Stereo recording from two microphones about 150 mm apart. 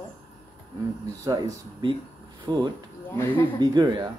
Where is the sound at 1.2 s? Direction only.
25° right (ahead or behind).